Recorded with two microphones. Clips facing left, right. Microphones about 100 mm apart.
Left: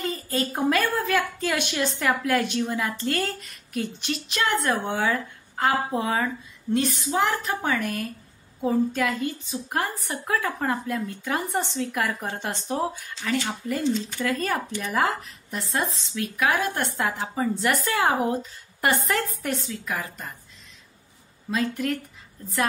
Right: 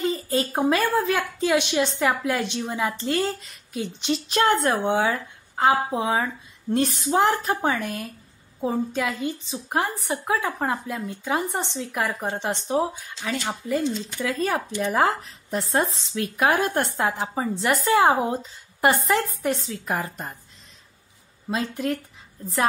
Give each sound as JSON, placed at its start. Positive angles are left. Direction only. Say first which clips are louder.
{"t": 0.0, "sound": "speech", "louder": "right 3 dB", "side_deg": -25}
{"t": 4.3, "sound": "a woman's voice", "louder": "right 4 dB", "side_deg": -35}
{"t": 6.7, "sound": "speech", "louder": "right 2 dB", "side_deg": -30}
{"t": 14.8, "sound": "speech", "louder": "right 5 dB", "side_deg": -30}
{"t": 21.5, "sound": "speech", "louder": "even", "side_deg": -30}